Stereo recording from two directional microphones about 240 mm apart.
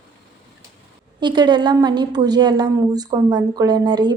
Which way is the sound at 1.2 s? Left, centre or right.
Centre.